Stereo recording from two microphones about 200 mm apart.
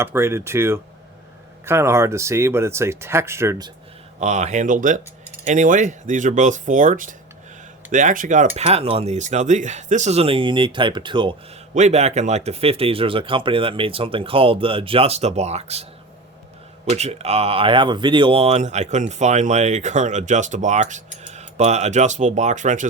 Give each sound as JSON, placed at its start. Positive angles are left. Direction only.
{"t": 0.0, "sound": "speech", "side_deg": -10}
{"t": 4.2, "sound": "speech", "side_deg": -35}
{"t": 11.7, "sound": "speech", "side_deg": -35}
{"t": 16.9, "sound": "speech", "side_deg": -35}